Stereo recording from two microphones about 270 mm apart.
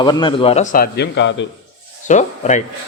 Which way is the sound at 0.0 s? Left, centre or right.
Centre.